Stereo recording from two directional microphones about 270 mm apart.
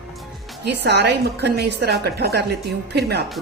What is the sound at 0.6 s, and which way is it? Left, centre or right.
A woman's voice, right.